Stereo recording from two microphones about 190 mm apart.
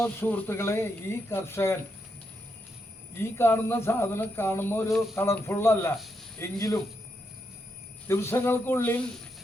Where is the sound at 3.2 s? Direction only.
10° left (ahead or behind).